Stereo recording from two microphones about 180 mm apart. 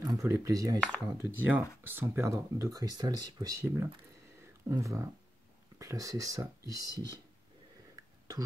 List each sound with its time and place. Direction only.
0.0 s speech: 20° right (ahead or behind)